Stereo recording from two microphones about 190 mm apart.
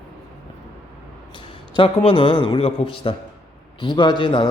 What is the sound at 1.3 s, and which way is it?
A man's voice, 25° left (ahead or behind).